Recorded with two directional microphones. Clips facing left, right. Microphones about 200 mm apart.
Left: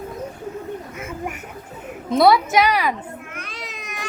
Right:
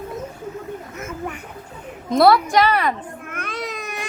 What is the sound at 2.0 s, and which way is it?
Speech, centre (ahead or behind).